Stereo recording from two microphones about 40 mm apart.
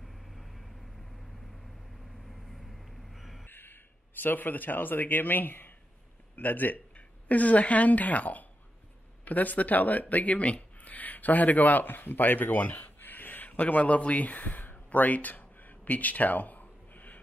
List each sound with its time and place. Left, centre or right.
0.0 s vehicle: centre
2.2 s vehicle: centre
3.1 s a sound: centre
3.4 s speech: left
7.2 s a woman's voice: left